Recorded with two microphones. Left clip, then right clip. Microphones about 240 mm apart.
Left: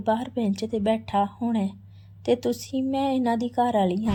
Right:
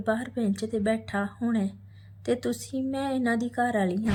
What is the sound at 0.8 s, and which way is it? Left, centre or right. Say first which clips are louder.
A woman's voice: left 7 dB; centre.